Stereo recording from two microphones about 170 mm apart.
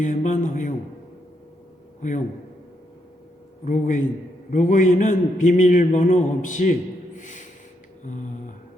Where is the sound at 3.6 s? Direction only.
50° left (ahead or behind).